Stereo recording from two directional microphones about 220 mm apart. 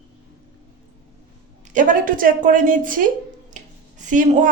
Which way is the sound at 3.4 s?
35° right (ahead or behind).